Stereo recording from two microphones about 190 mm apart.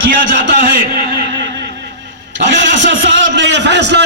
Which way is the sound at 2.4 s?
70° right (ahead or behind).